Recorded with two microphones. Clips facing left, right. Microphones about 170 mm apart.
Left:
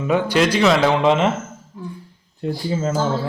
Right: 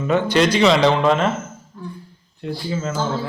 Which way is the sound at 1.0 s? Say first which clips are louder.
Left 1 dB; 20° left (ahead or behind).